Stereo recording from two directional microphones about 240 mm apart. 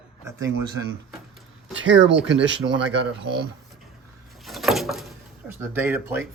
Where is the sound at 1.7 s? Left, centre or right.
Right.